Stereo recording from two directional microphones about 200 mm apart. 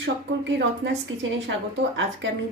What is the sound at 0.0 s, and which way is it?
Speech, 65° right (ahead or behind).